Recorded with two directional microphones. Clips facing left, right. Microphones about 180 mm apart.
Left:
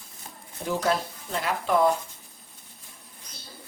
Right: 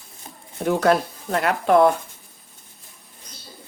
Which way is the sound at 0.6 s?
65° right (ahead or behind).